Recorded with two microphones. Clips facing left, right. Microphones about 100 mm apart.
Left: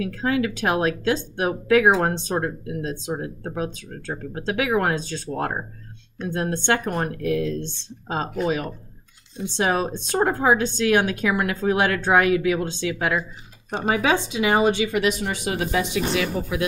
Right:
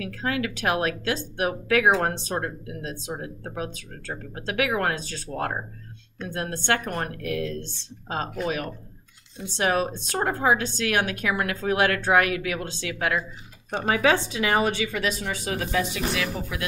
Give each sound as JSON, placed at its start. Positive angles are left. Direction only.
{"t": 0.7, "sound": "speech", "side_deg": 25}
{"t": 7.2, "sound": "speech", "side_deg": -90}
{"t": 7.6, "sound": "speech", "side_deg": 20}